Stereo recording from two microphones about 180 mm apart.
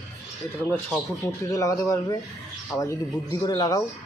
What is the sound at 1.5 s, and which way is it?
Speech, 20° left (ahead or behind).